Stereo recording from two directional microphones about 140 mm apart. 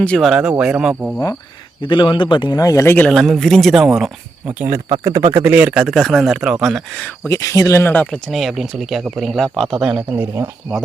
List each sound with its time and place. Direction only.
0.0 s a man's voice: 5° left (ahead or behind)
1.8 s a man's voice: 35° left (ahead or behind); by 3.1 s 15° left (ahead or behind)
3.1 s a man's voice: centre (ahead or behind)
4.4 s speech: 10° right (ahead or behind)
5.0 s speech: 25° right (ahead or behind)
5.4 s a man's voice: 10° right (ahead or behind)
7.3 s speech: 25° left (ahead or behind)
8.3 s a man's voice: centre (ahead or behind)